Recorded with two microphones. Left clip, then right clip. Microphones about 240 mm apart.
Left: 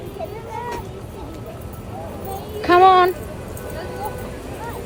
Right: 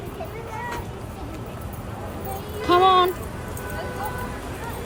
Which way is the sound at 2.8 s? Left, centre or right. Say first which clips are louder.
Left 5 dB; right.